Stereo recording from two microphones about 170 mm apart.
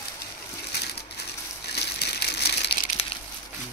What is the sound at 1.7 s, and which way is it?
Crushing, 75° left (ahead or behind).